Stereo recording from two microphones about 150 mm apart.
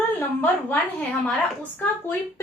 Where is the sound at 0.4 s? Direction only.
15° left (ahead or behind).